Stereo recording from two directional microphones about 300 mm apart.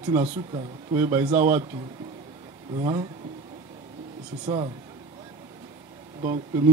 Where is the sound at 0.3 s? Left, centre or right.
Centre.